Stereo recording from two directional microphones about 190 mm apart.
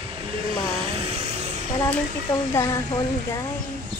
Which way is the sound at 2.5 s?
15° left (ahead or behind).